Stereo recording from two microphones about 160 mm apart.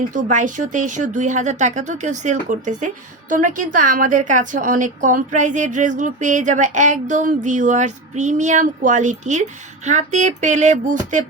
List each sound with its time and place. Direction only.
0.1 s speech: 50° right (ahead or behind)